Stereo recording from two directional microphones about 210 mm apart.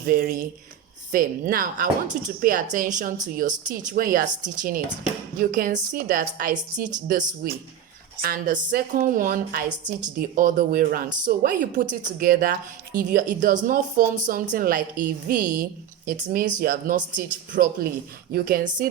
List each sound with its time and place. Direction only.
0.1 s speech: 45° right (ahead or behind)